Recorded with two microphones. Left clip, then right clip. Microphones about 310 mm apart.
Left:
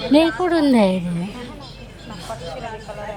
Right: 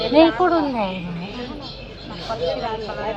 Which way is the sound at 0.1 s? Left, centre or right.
Left.